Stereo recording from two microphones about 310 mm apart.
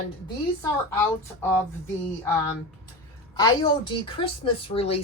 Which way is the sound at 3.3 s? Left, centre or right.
Centre.